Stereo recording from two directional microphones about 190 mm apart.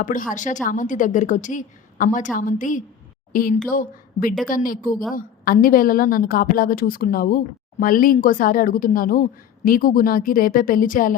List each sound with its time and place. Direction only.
0.0 s a woman's voice: 45° left (ahead or behind)